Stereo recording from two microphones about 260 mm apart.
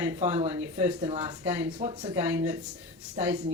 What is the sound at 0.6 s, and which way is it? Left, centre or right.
Speech, centre.